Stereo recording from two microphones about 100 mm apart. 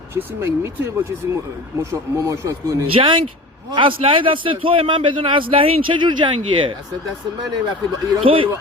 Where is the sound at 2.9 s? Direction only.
60° right (ahead or behind).